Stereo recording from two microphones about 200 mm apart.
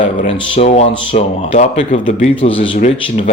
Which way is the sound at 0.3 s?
25° left (ahead or behind).